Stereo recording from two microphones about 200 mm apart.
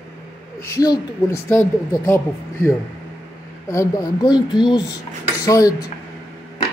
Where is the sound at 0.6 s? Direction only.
15° left (ahead or behind).